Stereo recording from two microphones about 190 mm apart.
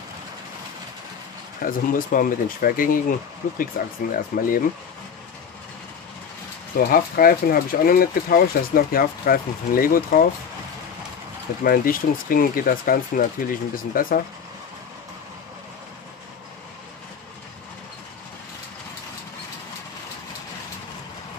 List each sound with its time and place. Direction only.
1.6 s speech: 45° left (ahead or behind)
6.9 s speech: 50° left (ahead or behind)
11.6 s speech: 50° left (ahead or behind)